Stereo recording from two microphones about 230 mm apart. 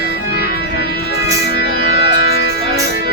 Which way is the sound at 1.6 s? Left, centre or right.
Left.